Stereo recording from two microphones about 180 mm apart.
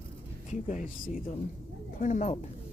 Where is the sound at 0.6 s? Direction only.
45° left (ahead or behind).